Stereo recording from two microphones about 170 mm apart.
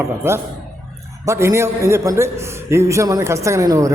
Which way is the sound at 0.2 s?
15° right (ahead or behind).